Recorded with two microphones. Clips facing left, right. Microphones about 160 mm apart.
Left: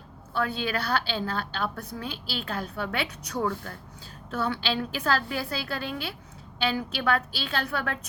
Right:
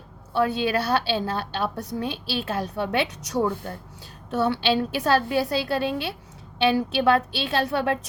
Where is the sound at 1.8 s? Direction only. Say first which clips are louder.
Right 7 dB; 20° right (ahead or behind).